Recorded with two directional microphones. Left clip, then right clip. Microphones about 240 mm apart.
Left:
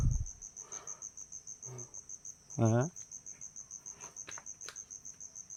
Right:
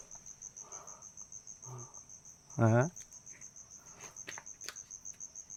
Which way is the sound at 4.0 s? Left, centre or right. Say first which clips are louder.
Even; centre.